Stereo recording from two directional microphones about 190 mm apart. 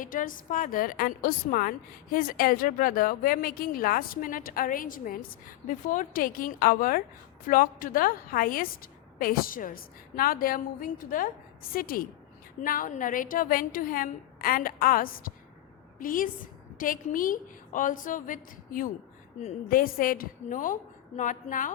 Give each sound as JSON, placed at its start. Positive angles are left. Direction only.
{"t": 0.0, "sound": "a woman's voice", "side_deg": 45}